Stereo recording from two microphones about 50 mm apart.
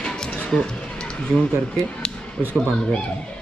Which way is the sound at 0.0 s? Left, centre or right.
Centre.